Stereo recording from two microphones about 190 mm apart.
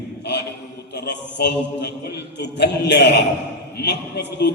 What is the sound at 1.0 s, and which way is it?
A man's voice, 65° left (ahead or behind).